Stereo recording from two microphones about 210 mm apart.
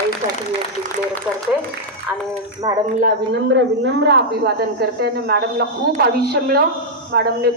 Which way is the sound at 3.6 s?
55° right (ahead or behind).